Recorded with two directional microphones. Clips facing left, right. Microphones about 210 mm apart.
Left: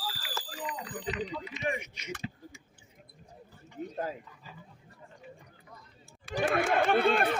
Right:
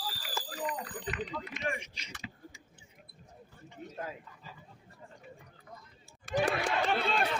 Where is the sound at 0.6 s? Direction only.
50° right (ahead or behind).